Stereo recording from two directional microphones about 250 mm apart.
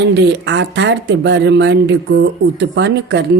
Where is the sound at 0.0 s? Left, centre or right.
Right.